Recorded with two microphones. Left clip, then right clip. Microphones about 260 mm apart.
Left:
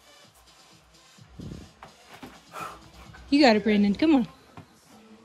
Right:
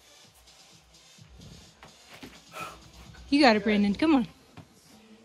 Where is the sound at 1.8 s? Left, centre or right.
Centre.